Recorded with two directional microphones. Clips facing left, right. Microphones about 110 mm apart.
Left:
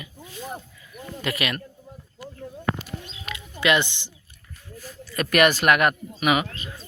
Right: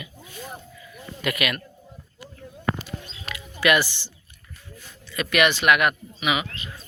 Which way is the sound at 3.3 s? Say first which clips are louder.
Right 1 dB; 25° left (ahead or behind).